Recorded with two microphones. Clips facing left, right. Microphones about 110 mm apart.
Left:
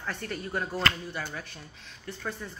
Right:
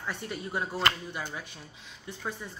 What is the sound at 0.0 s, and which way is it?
Speech, 15° right (ahead or behind).